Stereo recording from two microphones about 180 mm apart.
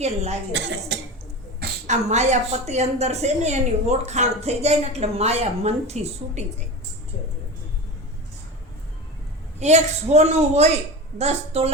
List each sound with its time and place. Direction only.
0.0 s a woman's voice: 35° right (ahead or behind)
0.5 s speech: 75° right (ahead or behind)
1.9 s a woman's voice: 40° right (ahead or behind)
9.6 s a woman's voice: 40° right (ahead or behind)